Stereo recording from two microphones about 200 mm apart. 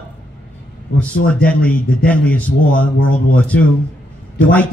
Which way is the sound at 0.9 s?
60° left (ahead or behind).